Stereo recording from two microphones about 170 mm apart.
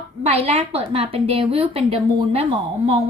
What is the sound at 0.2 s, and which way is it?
A woman's voice, 35° right (ahead or behind).